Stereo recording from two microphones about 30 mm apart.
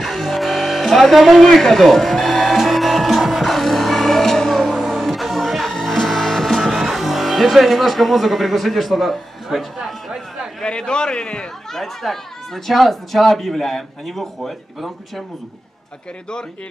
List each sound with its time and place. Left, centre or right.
0.0 s music: centre
4.7 s music: centre
6.5 s speech: centre
9.5 s speech: centre
9.8 s speech: centre
10.6 s a man's voice: left
11.7 s speech: centre